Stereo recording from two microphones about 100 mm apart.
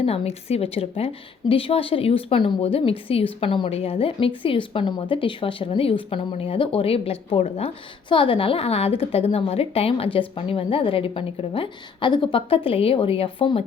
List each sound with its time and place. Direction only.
0.0 s a woman's voice: 90° left
3.4 s a woman's voice: 65° left (ahead or behind)
4.4 s a woman's voice: 60° left (ahead or behind); by 7.7 s 85° left
8.1 s a woman's voice: 60° left (ahead or behind)